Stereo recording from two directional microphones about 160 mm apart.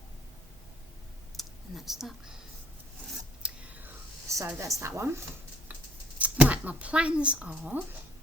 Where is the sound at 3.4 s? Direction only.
10° right (ahead or behind).